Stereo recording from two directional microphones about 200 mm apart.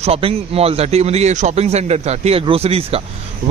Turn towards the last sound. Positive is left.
turn(degrees=-30)  # may be behind; listen again after turning